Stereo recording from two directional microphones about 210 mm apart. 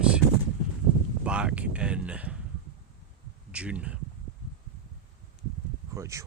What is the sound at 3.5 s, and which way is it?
Speech, 5° right (ahead or behind).